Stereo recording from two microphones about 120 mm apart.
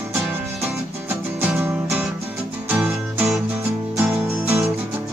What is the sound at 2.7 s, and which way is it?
Music, 15° right (ahead or behind).